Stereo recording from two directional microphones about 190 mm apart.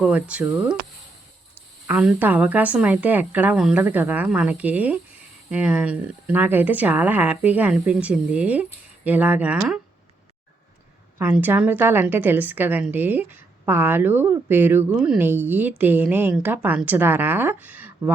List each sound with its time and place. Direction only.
0.0 s a woman's voice: 5° right (ahead or behind)
1.9 s a woman's voice: 5° right (ahead or behind)
11.2 s a woman's voice: 10° right (ahead or behind)